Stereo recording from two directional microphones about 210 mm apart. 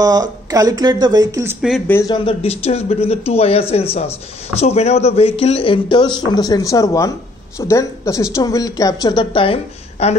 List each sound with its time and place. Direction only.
0.0 s speech: 15° right (ahead or behind)
1.9 s a woman's voice: 15° left (ahead or behind)